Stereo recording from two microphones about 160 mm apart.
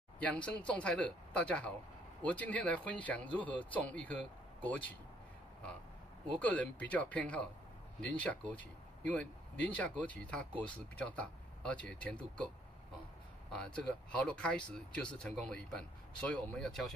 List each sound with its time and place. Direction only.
0.2 s speech: 10° left (ahead or behind)
6.4 s speech: 10° left (ahead or behind)
13.5 s speech: 5° left (ahead or behind)